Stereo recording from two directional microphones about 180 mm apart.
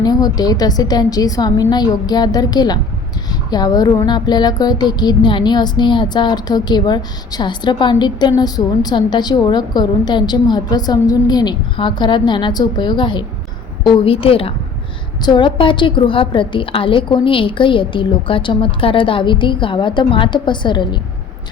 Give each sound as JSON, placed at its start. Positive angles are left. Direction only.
{"t": 0.0, "sound": "a woman's voice", "side_deg": 20}